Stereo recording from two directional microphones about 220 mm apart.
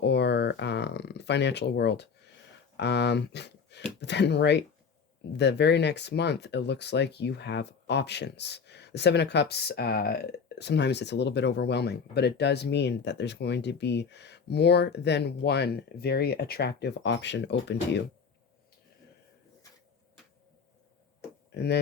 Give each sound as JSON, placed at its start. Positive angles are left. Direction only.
{"t": 0.0, "sound": "a sound", "side_deg": 50}
{"t": 2.7, "sound": "speech", "side_deg": 50}
{"t": 21.5, "sound": "speech", "side_deg": 50}